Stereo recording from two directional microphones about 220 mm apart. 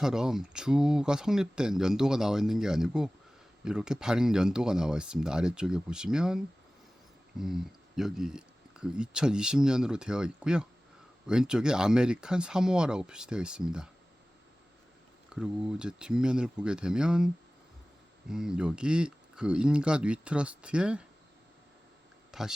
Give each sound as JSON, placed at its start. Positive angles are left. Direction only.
{"t": 0.0, "sound": "speech", "side_deg": 0}
{"t": 15.4, "sound": "speech", "side_deg": -5}
{"t": 22.3, "sound": "a sound", "side_deg": 0}